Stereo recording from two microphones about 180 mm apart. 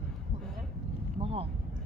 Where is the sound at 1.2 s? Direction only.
30° right (ahead or behind).